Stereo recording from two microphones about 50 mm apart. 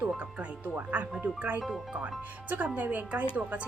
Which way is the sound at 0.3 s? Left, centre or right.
Right.